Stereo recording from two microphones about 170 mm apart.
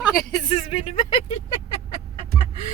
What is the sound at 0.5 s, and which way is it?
Music, 35° left (ahead or behind).